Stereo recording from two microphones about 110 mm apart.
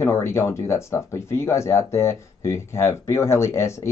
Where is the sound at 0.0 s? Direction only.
25° left (ahead or behind).